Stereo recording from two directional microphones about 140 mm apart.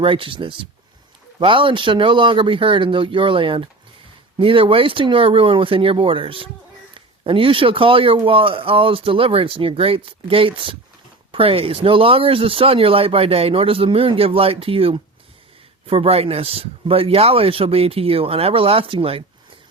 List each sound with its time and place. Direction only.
0.0 s speech: 40° right (ahead or behind)